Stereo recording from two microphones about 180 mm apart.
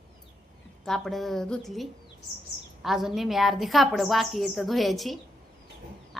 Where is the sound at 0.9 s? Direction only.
Centre (ahead or behind).